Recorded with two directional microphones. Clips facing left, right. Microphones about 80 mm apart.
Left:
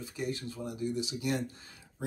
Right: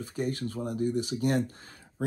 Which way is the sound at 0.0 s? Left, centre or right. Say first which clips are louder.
Right 5 dB; right.